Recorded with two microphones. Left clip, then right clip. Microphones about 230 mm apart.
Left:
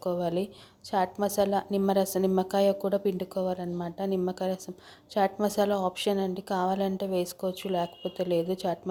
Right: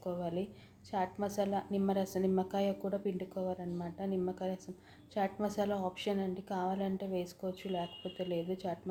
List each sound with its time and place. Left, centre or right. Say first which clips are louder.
0.0 s a woman's voice: left 9 dB; left